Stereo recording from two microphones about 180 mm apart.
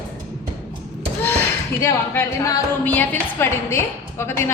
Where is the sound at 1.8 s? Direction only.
15° left (ahead or behind).